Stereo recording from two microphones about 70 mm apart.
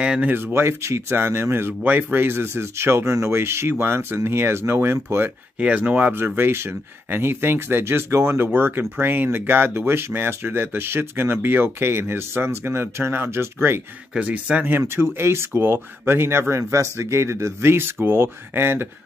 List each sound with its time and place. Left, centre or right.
0.0 s speech: centre
0.3 s speech: right
1.8 s speech: right
5.6 s speech: right
6.2 s speech: right
14.1 s speech: centre
14.8 s speech: right